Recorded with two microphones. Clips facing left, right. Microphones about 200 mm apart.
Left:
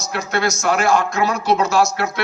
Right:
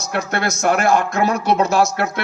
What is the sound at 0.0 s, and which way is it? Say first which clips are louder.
A man's voice: even; 55° right (ahead or behind).